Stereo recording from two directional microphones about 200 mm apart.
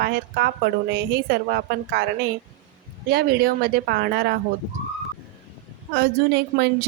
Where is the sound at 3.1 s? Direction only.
50° right (ahead or behind).